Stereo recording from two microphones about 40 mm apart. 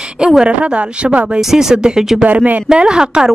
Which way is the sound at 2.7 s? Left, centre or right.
Centre.